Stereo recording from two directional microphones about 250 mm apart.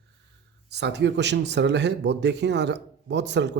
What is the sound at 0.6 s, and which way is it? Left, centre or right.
Speech, right.